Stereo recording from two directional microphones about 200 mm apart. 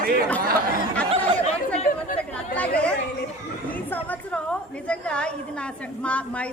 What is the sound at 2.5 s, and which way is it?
Speech, 5° left (ahead or behind).